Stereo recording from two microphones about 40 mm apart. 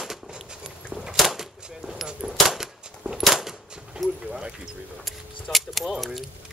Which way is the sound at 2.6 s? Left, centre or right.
Centre.